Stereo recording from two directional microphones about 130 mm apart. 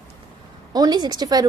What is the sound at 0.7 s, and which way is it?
Speech, 30° right (ahead or behind).